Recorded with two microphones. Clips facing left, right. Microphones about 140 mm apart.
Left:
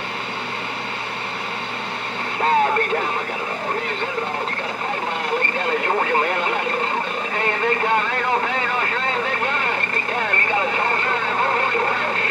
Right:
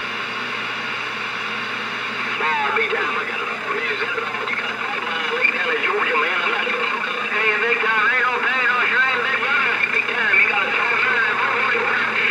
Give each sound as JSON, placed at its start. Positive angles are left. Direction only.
{"t": 2.4, "sound": "vehicle", "side_deg": 35}
{"t": 5.7, "sound": "speech", "side_deg": 35}
{"t": 7.3, "sound": "vehicle", "side_deg": 35}